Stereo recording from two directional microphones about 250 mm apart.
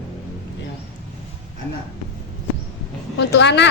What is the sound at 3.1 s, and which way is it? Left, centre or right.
Speech, left.